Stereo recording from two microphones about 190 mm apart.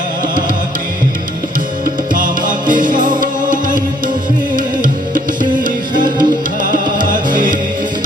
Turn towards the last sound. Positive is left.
turn(degrees=-45)  # may be behind; listen again after turning